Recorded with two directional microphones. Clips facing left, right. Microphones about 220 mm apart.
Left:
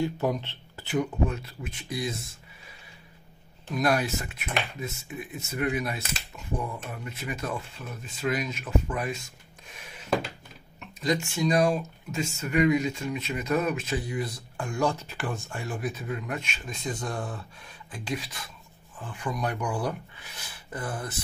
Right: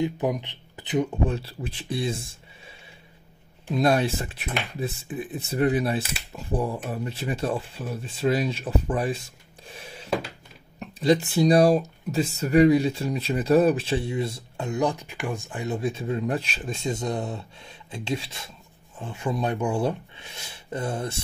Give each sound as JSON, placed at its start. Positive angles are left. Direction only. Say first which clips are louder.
{"t": 0.0, "sound": "speech", "louder": "right 2 dB", "side_deg": -15}
{"t": 1.2, "sound": "speech", "louder": "right 2 dB", "side_deg": -30}
{"t": 3.7, "sound": "speech", "louder": "right 4 dB", "side_deg": -30}
{"t": 9.7, "sound": "a sound", "louder": "right 6 dB", "side_deg": -30}
{"t": 10.8, "sound": "speech", "louder": "right 7 dB", "side_deg": -35}